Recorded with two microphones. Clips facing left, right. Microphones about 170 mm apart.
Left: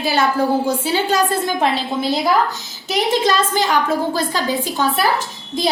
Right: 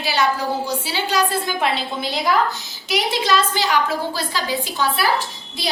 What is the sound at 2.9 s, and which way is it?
A woman's voice, 45° left (ahead or behind).